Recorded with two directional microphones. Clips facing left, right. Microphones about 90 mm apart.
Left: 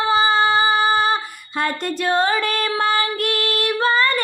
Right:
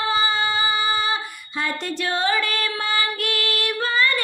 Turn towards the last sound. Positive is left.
turn(degrees=45)  # may be behind; listen again after turning